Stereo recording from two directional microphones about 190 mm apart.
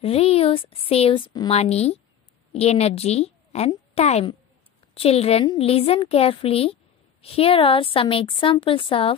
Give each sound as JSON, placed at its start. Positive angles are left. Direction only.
{"t": 0.0, "sound": "a woman's voice", "side_deg": 30}